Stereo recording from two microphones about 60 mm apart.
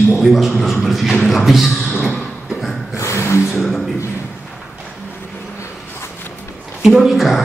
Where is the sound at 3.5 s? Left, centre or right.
Centre.